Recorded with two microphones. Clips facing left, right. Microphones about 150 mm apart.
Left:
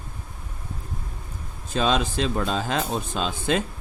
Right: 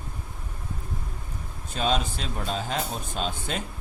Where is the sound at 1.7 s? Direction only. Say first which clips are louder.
Left 4 dB; 90° left.